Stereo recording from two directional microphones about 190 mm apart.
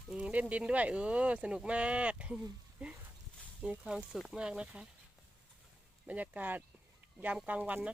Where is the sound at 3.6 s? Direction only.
5° right (ahead or behind).